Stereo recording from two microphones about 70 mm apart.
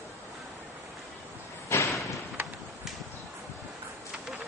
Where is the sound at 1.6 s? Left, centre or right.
Left.